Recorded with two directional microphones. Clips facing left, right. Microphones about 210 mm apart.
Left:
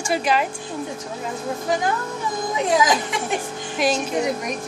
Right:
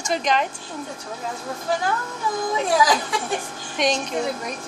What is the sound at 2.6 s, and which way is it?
Speech, 20° left (ahead or behind).